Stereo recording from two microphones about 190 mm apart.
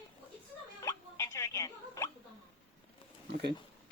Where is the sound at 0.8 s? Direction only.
15° left (ahead or behind).